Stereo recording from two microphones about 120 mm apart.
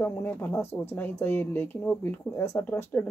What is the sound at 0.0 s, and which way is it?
Speech, 15° left (ahead or behind).